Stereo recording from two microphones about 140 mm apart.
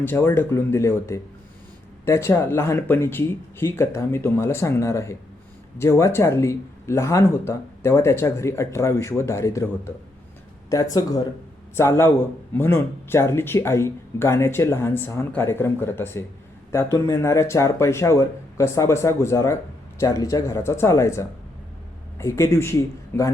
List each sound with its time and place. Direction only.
0.0 s speech: 15° left (ahead or behind)
10.7 s speech: 25° left (ahead or behind)